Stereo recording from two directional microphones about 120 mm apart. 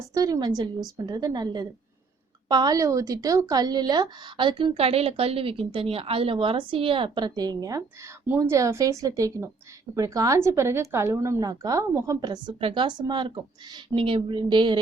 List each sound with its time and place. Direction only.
0.1 s a woman's voice: 30° right (ahead or behind)